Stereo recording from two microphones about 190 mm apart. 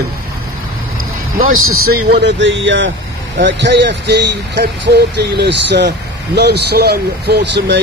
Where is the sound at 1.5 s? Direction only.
90° right.